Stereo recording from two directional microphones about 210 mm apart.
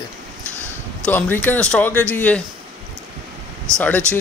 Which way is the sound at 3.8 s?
5° left (ahead or behind).